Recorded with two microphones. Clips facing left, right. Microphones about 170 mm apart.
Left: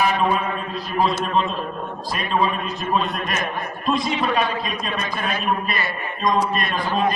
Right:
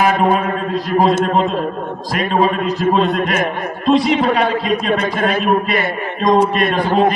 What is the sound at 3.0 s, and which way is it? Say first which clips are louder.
Speech: right 10 dB; 80° right.